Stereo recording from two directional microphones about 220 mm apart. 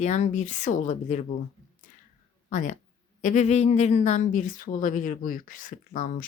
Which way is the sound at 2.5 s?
35° left (ahead or behind).